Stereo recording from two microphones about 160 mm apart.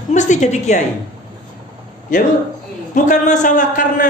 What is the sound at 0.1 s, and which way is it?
Speech, 50° left (ahead or behind).